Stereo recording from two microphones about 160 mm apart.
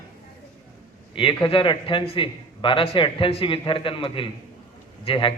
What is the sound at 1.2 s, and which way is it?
A man's voice, 30° left (ahead or behind).